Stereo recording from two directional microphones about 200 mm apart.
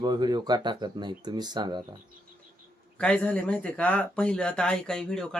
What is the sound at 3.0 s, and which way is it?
Speech, 5° left (ahead or behind).